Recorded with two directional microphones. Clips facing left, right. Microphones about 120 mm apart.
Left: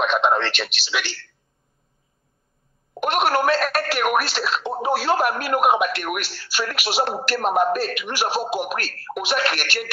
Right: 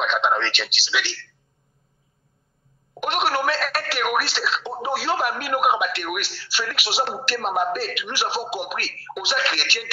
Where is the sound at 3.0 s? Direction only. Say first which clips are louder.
Left 3 dB; 45° left (ahead or behind).